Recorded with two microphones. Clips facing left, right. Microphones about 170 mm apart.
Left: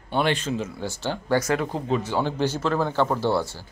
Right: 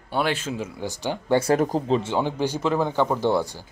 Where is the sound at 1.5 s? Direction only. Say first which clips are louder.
Right 4 dB; 40° right (ahead or behind).